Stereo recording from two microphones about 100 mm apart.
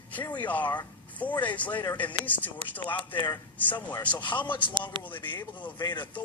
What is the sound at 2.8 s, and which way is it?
Speech, 50° left (ahead or behind).